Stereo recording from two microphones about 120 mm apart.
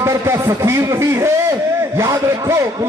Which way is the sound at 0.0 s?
20° right (ahead or behind).